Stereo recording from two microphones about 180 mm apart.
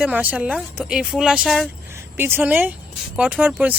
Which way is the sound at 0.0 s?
10° right (ahead or behind).